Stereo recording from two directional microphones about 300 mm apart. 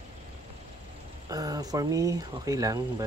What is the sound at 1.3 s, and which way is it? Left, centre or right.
Speech, centre.